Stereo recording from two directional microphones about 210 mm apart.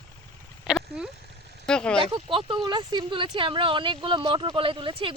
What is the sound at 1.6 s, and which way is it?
Speech, 5° left (ahead or behind).